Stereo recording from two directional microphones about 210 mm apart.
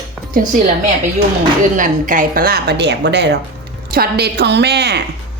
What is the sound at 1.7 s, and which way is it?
A woman's voice, 40° right (ahead or behind).